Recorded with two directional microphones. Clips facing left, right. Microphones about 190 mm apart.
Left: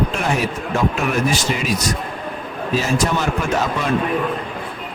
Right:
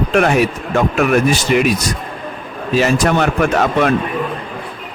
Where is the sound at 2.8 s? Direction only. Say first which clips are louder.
Right 7 dB; 70° right (ahead or behind).